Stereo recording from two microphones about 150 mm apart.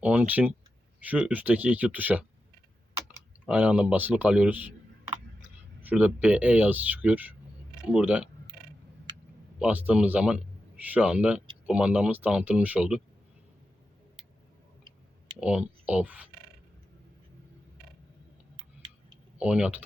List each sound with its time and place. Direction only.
0.0 s speech: 10° right (ahead or behind)
3.4 s speech: 10° right (ahead or behind)
5.8 s speech: 10° right (ahead or behind)
9.6 s speech: 10° right (ahead or behind)
15.4 s speech: 5° right (ahead or behind)
19.4 s speech: 5° right (ahead or behind)